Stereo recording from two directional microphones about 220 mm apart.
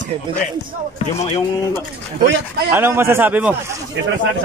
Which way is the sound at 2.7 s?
10° right (ahead or behind).